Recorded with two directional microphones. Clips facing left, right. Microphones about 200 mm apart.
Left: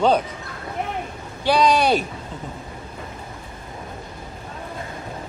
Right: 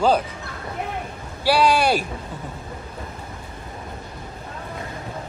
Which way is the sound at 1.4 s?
5° right (ahead or behind).